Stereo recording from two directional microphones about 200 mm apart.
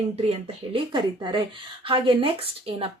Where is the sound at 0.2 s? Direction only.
25° right (ahead or behind).